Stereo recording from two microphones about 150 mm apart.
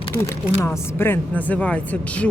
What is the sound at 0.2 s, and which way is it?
Speech, 15° left (ahead or behind).